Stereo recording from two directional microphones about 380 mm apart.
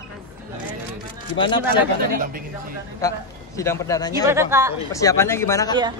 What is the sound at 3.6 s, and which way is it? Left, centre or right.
Speech, centre.